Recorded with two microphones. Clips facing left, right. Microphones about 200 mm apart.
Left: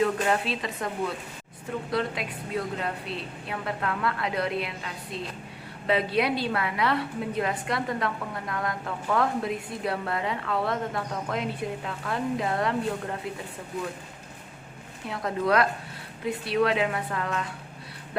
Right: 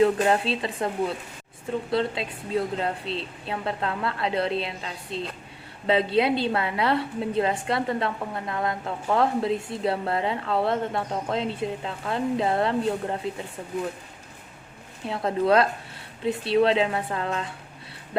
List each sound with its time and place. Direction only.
0.0 s a woman's voice: 30° right (ahead or behind)
15.0 s a woman's voice: 30° right (ahead or behind)